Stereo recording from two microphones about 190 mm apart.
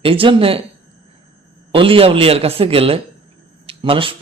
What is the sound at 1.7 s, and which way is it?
Speech, 30° right (ahead or behind).